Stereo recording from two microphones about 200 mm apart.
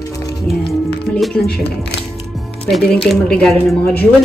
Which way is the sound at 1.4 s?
55° left (ahead or behind).